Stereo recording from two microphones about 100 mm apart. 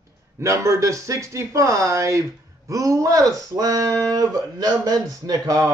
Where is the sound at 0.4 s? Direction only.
30° right (ahead or behind).